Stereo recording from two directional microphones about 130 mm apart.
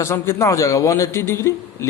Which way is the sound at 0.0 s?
20° left (ahead or behind).